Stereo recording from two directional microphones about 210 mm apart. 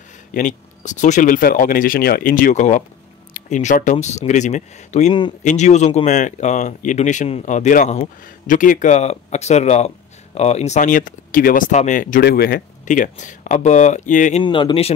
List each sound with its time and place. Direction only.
0.3 s speech: 35° left (ahead or behind)
14.4 s speech: 25° left (ahead or behind)